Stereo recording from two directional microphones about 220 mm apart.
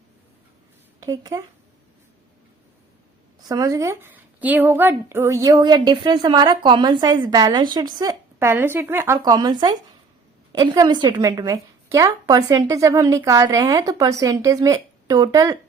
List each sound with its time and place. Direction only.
1.0 s a woman's voice: 15° right (ahead or behind)
3.5 s a woman's voice: 15° right (ahead or behind)